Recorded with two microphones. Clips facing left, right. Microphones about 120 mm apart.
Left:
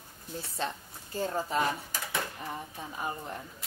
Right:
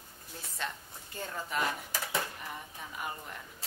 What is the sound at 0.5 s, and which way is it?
A woman's voice, 30° left (ahead or behind).